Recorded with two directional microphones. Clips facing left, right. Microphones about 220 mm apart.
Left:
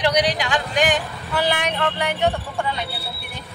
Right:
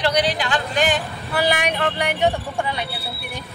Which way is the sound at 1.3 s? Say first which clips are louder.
Right 1 dB; 10° right (ahead or behind).